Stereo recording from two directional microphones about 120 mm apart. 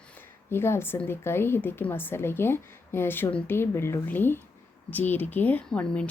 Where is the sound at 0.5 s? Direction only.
20° left (ahead or behind).